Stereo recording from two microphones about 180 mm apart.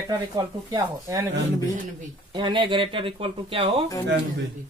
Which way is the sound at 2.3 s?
25° right (ahead or behind).